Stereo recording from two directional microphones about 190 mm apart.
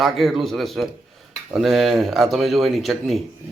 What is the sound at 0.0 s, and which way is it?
Speech, centre (ahead or behind).